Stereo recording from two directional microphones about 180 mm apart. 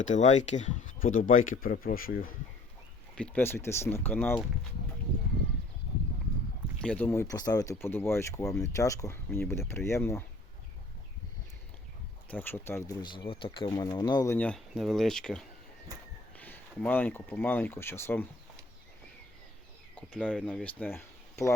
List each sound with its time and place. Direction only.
0.1 s speech: 40° left (ahead or behind)
3.2 s speech: 5° left (ahead or behind)
6.8 s speech: 10° left (ahead or behind)
12.3 s speech: 10° left (ahead or behind)
14.3 s speech: 5° left (ahead or behind)
20.2 s speech: 5° left (ahead or behind)